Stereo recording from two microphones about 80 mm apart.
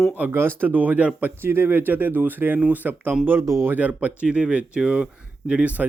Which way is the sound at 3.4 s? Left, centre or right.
Right.